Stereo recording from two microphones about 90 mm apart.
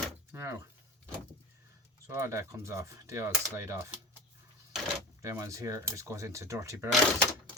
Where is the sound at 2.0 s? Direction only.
30° right (ahead or behind).